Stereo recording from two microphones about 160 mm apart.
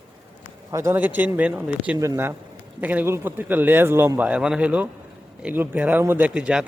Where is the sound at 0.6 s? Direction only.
15° right (ahead or behind).